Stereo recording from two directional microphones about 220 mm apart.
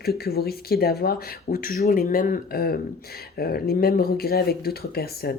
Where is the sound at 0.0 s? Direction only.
45° left (ahead or behind).